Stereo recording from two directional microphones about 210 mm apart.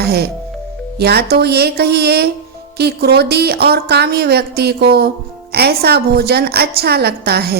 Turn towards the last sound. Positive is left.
turn(degrees=-50)  # may be behind; listen again after turning